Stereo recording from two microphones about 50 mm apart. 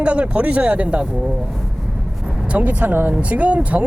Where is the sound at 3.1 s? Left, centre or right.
Right.